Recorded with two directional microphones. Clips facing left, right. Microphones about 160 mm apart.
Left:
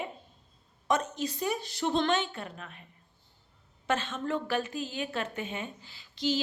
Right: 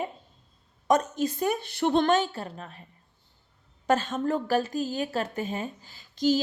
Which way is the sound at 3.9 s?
40° right (ahead or behind).